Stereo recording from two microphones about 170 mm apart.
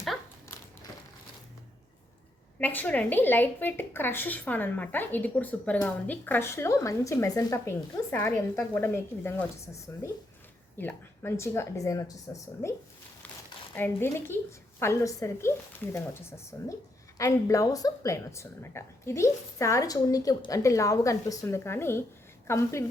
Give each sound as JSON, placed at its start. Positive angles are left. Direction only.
{"t": 2.6, "sound": "a woman's voice", "side_deg": 10}
{"t": 13.7, "sound": "a woman's voice", "side_deg": 10}